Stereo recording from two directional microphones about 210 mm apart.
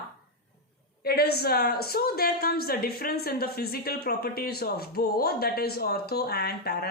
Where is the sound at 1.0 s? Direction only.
50° left (ahead or behind).